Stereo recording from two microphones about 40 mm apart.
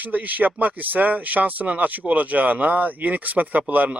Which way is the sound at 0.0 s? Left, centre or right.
Right.